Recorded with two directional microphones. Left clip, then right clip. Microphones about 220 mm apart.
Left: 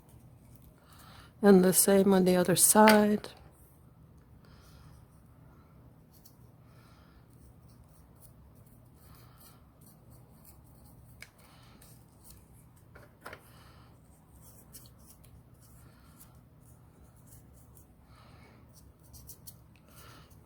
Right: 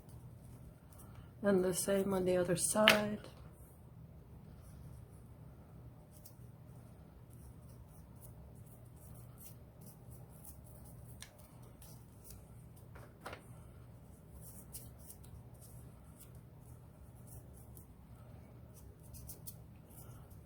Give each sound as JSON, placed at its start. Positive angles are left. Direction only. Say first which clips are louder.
{"t": 1.4, "sound": "speech", "louder": "left 10 dB", "side_deg": 55}